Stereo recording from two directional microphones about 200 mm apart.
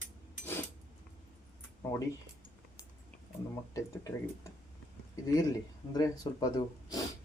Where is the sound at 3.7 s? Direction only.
15° left (ahead or behind).